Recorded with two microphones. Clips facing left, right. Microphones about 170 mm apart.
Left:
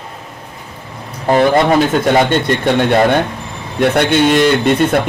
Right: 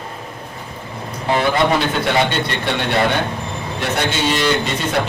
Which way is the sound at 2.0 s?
50° left (ahead or behind).